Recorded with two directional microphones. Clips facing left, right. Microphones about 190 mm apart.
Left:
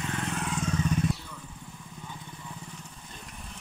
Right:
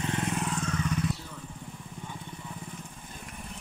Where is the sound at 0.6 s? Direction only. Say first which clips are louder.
Left 2 dB; 20° left (ahead or behind).